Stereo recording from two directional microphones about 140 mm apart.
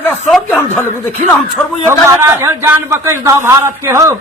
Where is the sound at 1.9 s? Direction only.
15° right (ahead or behind).